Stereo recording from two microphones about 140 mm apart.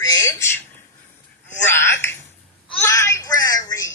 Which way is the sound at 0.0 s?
25° left (ahead or behind).